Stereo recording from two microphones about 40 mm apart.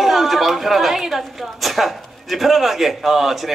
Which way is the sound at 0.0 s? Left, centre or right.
Centre.